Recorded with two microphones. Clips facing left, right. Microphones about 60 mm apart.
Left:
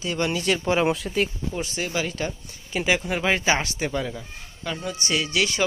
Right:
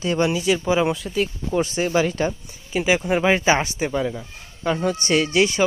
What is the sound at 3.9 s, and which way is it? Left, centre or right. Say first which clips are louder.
Speech: right 4 dB; centre.